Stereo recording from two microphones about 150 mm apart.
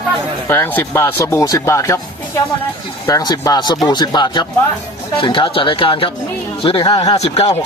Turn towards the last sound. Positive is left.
turn(degrees=45)  # may be behind; listen again after turning